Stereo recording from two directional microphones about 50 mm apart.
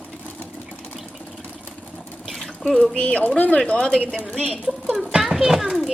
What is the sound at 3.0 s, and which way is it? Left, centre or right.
Speech, left.